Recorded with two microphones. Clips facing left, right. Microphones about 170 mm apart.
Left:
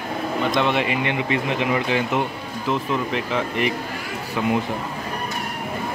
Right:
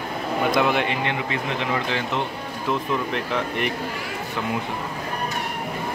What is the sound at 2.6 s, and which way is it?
Speech, centre (ahead or behind).